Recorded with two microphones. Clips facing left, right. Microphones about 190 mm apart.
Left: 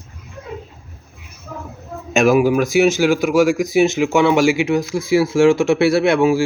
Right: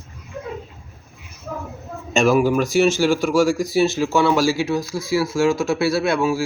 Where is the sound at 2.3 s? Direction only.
10° left (ahead or behind).